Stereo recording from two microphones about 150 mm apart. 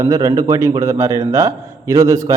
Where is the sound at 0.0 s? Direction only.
20° right (ahead or behind).